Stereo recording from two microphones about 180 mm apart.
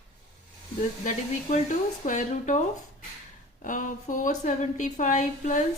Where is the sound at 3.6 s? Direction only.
45° left (ahead or behind).